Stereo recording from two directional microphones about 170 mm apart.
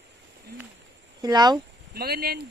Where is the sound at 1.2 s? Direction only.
25° right (ahead or behind).